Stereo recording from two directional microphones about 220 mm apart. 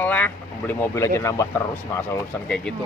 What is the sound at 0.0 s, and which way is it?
Speech, 5° left (ahead or behind).